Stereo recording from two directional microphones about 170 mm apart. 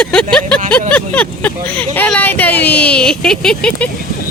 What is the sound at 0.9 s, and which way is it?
Speech, 10° left (ahead or behind).